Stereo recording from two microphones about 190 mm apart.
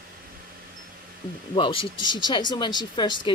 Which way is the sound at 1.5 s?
25° left (ahead or behind).